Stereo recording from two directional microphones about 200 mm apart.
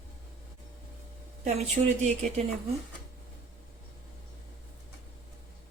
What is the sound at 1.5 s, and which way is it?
Speech, 35° right (ahead or behind).